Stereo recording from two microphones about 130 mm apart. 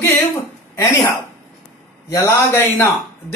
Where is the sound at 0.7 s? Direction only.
25° left (ahead or behind).